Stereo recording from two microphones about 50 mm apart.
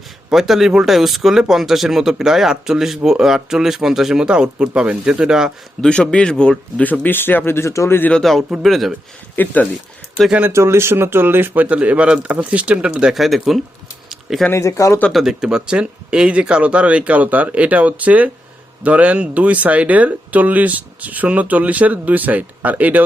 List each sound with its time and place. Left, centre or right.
0.3 s speech: centre; by 5.2 s right
5.2 s speech: centre
5.9 s speech: centre
7.0 s speech: left
8.2 s speech: centre
9.3 s speech: left
10.5 s speech: right
13.1 s speech: centre
14.1 s a sound: centre
14.5 s speech: left
15.1 s speech: centre; by 23.0 s right